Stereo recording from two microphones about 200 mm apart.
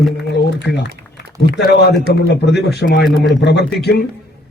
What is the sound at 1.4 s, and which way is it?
A man's voice, 55° left (ahead or behind).